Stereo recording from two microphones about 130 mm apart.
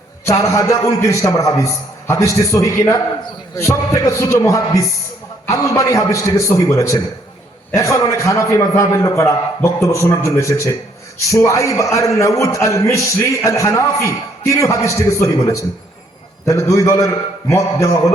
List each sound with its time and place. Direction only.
0.3 s a man's voice: 25° left (ahead or behind)